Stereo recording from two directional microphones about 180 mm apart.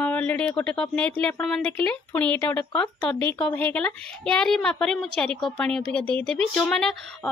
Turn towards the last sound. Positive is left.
turn(degrees=5)  # may be behind; listen again after turning